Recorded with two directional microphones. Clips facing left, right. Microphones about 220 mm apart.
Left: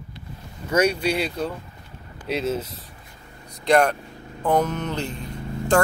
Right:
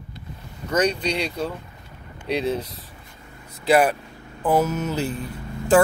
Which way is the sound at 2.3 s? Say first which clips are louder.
Right 1 dB; centre (ahead or behind).